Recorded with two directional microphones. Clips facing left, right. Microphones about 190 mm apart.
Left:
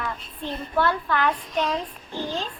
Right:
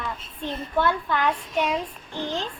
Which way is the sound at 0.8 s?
15° right (ahead or behind).